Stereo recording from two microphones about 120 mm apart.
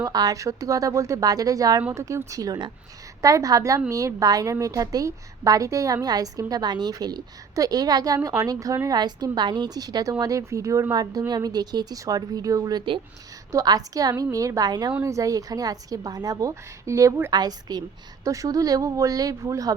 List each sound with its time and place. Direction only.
0.0 s a woman's voice: 30° right (ahead or behind)
17.3 s a woman's voice: 35° right (ahead or behind)